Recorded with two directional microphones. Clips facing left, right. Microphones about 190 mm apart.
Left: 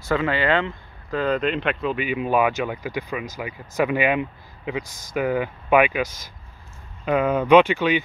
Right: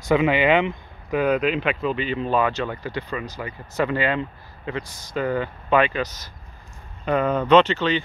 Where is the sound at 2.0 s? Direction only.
10° left (ahead or behind).